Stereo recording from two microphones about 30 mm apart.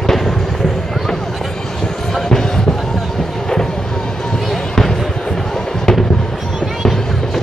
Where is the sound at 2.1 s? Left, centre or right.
Centre.